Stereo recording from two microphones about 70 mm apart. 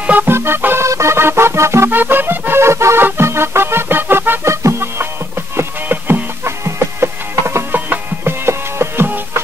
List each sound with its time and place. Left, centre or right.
0.0 s music: right
0.3 s music: right
0.8 s music: right
6.4 s music: right